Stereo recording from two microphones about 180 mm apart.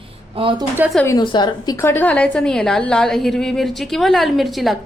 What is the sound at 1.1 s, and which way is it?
A woman's voice, 25° left (ahead or behind).